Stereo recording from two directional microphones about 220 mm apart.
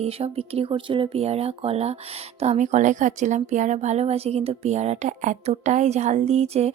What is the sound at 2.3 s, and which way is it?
Speech, 30° right (ahead or behind).